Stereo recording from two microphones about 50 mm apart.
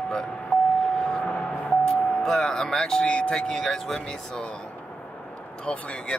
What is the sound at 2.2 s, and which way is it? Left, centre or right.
Speech, centre.